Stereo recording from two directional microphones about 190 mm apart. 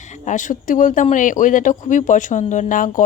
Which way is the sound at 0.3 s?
40° left (ahead or behind).